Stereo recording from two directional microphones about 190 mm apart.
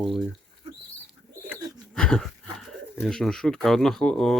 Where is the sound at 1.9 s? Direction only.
5° left (ahead or behind).